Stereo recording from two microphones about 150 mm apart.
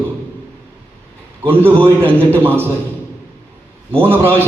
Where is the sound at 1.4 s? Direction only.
15° right (ahead or behind).